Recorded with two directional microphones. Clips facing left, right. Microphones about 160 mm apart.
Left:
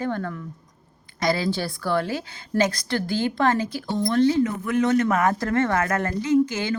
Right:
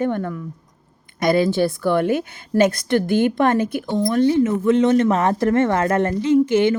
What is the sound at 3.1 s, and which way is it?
Speech, 55° right (ahead or behind).